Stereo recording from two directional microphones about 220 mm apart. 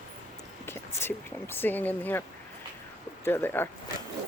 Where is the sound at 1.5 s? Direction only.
10° left (ahead or behind).